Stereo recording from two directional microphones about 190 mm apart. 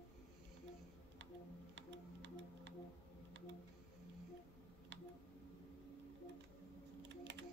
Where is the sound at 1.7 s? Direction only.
70° right (ahead or behind).